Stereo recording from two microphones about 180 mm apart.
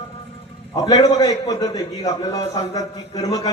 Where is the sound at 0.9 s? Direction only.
20° left (ahead or behind).